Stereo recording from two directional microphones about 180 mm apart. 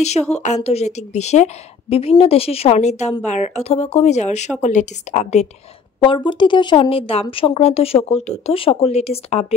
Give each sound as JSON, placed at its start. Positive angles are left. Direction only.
{"t": 0.3, "sound": "speech", "side_deg": 40}
{"t": 5.9, "sound": "speech", "side_deg": 25}